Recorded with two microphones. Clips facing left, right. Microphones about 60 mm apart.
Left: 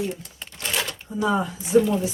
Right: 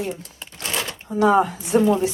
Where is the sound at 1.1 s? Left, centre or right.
Right.